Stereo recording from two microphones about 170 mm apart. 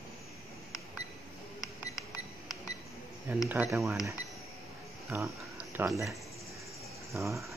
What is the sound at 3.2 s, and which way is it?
Speech, 10° right (ahead or behind).